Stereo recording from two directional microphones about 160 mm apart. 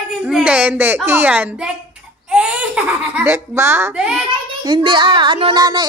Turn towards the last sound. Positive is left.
turn(degrees=-25)  # may be behind; listen again after turning